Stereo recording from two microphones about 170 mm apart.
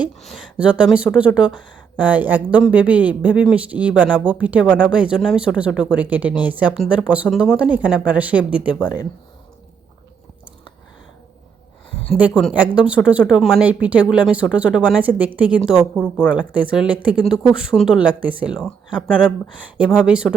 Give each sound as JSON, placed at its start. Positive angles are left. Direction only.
{"t": 0.0, "sound": "speech", "side_deg": 0}
{"t": 8.8, "sound": "speech", "side_deg": 25}
{"t": 12.1, "sound": "speech", "side_deg": -5}